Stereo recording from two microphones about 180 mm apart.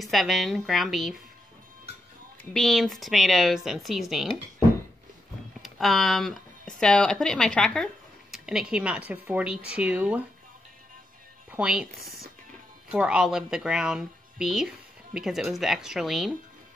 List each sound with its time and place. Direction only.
0.0 s speech: centre (ahead or behind)
2.5 s speech: centre (ahead or behind)
5.6 s a sound: centre (ahead or behind)
6.8 s speech: 5° left (ahead or behind)
11.5 s speech: 5° right (ahead or behind)
12.0 s a sound: 55° right (ahead or behind)
12.9 s speech: 5° right (ahead or behind)